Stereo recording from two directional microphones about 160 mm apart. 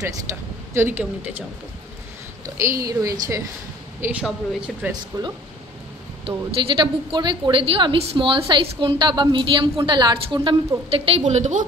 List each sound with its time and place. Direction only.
0.3 s speech: 15° right (ahead or behind)
2.5 s a woman's voice: 20° right (ahead or behind)
4.0 s speech: 5° right (ahead or behind)
5.1 s a woman's voice: 25° right (ahead or behind)
11.2 s a woman's voice: 50° right (ahead or behind)